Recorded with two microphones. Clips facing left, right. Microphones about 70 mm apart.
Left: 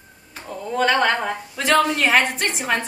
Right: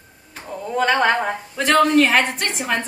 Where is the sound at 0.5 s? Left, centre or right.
Centre.